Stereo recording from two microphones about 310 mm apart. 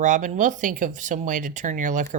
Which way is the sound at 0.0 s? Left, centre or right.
Right.